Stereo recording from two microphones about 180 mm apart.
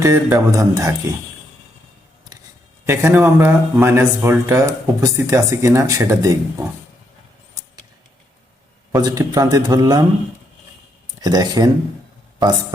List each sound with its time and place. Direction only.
0.0 s speech: 15° right (ahead or behind)
2.8 s speech: 15° right (ahead or behind)
9.0 s a man's voice: 20° right (ahead or behind)
11.2 s a man's voice: 20° right (ahead or behind)